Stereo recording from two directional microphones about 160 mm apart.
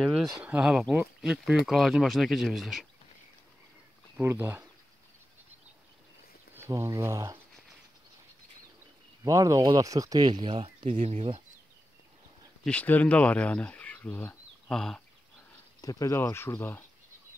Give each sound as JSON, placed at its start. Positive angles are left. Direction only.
{"t": 0.0, "sound": "a sound", "side_deg": 0}
{"t": 0.4, "sound": "speech", "side_deg": -10}
{"t": 4.2, "sound": "speech", "side_deg": -10}
{"t": 6.5, "sound": "speech", "side_deg": -15}
{"t": 9.2, "sound": "speech", "side_deg": -20}
{"t": 10.9, "sound": "speech", "side_deg": -50}
{"t": 12.6, "sound": "speech", "side_deg": 10}
{"t": 15.8, "sound": "speech", "side_deg": 20}